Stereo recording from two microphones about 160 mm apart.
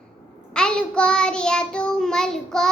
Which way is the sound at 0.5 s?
5° left (ahead or behind).